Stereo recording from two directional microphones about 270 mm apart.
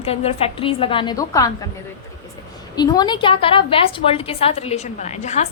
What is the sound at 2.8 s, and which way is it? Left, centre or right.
A woman's voice, centre.